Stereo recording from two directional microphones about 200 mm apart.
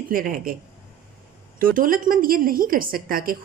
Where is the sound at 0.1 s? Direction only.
45° right (ahead or behind).